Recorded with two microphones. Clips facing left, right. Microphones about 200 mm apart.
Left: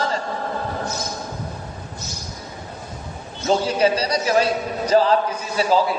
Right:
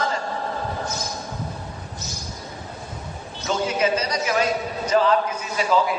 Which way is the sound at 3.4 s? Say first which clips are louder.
Left 4 dB; 35° left (ahead or behind).